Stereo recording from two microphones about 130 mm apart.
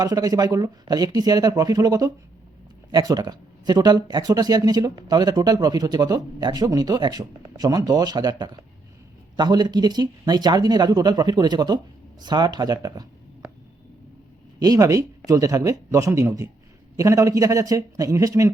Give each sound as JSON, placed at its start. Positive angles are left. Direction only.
{"t": 0.0, "sound": "speech", "side_deg": -30}
{"t": 14.6, "sound": "speech", "side_deg": -25}